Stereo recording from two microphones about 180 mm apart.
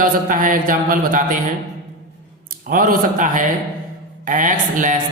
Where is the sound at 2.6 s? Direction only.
50° right (ahead or behind).